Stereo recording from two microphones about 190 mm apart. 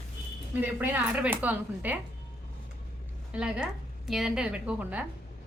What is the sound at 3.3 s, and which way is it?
A woman's voice, 5° right (ahead or behind).